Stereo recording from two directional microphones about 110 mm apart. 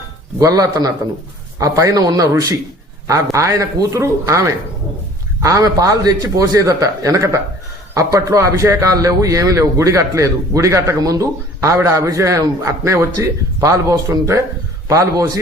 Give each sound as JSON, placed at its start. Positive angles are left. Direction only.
{"t": 0.3, "sound": "a man's voice", "side_deg": -30}